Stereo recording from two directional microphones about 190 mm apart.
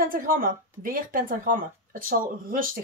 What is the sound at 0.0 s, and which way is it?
Speech, 50° right (ahead or behind).